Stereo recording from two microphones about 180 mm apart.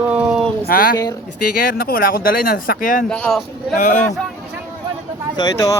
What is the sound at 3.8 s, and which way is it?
Speech, 45° left (ahead or behind).